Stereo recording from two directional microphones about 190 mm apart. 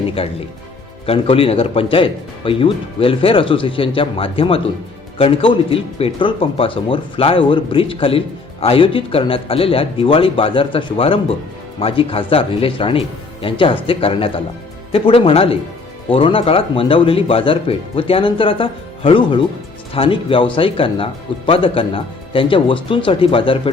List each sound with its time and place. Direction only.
0.1 s speech: 30° left (ahead or behind)